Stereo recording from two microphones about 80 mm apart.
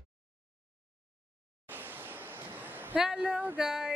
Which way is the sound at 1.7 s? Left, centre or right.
Right.